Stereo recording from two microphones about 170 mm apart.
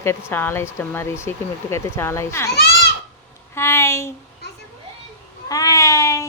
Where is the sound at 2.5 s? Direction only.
70° left (ahead or behind).